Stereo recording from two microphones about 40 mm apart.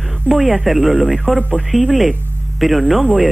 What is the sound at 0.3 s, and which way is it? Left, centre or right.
Speech, centre.